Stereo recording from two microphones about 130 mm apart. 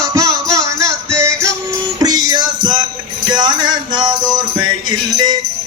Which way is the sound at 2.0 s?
30° right (ahead or behind).